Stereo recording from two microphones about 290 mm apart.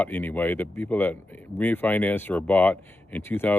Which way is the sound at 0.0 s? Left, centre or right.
Centre.